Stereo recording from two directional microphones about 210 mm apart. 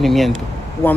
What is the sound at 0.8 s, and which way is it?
Speech, 10° left (ahead or behind).